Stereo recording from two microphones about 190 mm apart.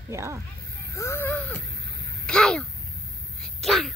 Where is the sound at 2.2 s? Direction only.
5° left (ahead or behind).